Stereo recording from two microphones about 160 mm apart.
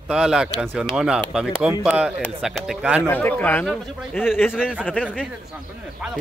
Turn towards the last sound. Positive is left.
turn(degrees=-5)  # may be behind; listen again after turning